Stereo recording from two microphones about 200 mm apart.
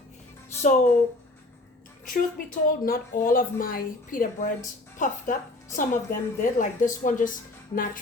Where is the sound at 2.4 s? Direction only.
45° left (ahead or behind).